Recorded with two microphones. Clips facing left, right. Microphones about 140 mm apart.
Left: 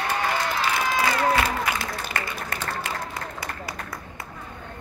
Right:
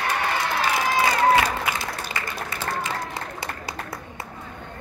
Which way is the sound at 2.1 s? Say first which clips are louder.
Even; 55° left (ahead or behind).